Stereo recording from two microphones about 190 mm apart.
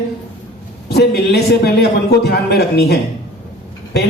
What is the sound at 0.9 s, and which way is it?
A man's voice, 60° left (ahead or behind).